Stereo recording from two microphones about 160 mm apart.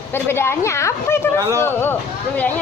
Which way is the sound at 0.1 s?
15° left (ahead or behind).